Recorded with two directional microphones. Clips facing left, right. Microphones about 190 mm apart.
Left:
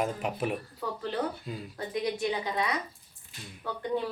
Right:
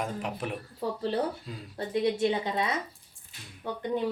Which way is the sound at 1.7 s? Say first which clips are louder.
Right 5 dB; 30° right (ahead or behind).